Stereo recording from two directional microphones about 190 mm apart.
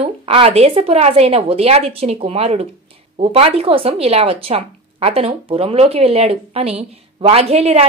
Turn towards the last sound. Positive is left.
turn(degrees=-35)  # may be behind; listen again after turning